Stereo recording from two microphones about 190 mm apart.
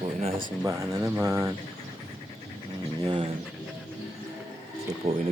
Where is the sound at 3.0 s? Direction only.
25° right (ahead or behind).